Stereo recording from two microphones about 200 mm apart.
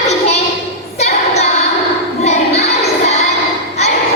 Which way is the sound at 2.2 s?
35° left (ahead or behind).